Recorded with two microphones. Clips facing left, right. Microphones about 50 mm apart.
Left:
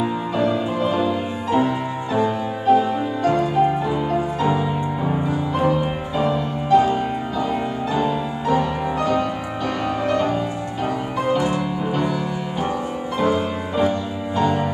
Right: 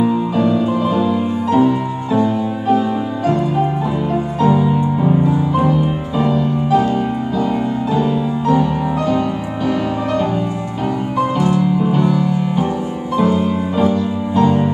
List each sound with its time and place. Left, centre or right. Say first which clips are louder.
0.0 s music: right 5 dB; centre
7.9 s music: right 4 dB; centre
11.3 s music: right 4 dB; centre
11.6 s music: right 7 dB; centre